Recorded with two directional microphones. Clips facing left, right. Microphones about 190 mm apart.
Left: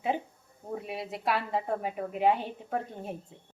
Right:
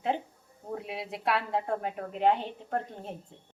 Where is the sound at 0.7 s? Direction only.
Centre (ahead or behind).